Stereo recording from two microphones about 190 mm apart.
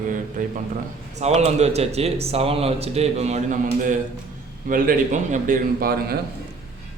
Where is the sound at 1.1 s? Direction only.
35° right (ahead or behind).